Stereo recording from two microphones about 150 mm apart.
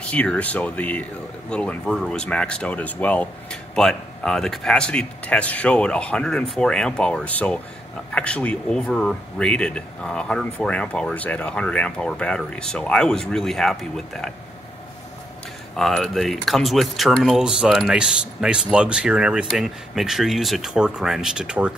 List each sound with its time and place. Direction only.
0.1 s speech: 10° left (ahead or behind)
15.7 s speech: centre (ahead or behind)